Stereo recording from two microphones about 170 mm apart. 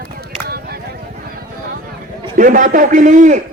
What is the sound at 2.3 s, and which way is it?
Music, 50° right (ahead or behind).